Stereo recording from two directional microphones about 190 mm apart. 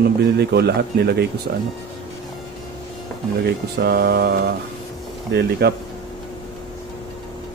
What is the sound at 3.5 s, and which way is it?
A man's voice, 55° right (ahead or behind).